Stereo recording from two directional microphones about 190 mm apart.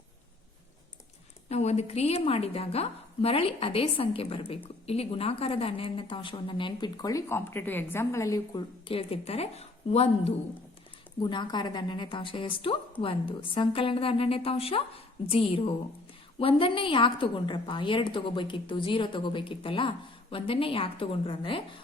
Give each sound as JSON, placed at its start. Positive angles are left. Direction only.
{"t": 1.5, "sound": "a woman's voice", "side_deg": 35}
{"t": 8.9, "sound": "a woman's voice", "side_deg": 30}